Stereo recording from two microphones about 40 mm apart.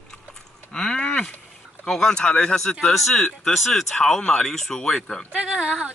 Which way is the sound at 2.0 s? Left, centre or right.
Left.